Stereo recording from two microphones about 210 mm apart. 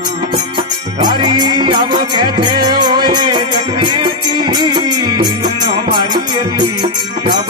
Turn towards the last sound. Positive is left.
turn(degrees=-25)  # may be behind; listen again after turning